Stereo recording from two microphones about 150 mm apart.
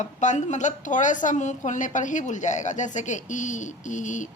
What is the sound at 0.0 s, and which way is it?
A woman's voice, 55° left (ahead or behind).